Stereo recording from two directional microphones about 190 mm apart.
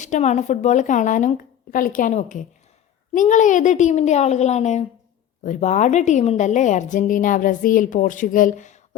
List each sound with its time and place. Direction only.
0.0 s a woman's voice: 40° left (ahead or behind)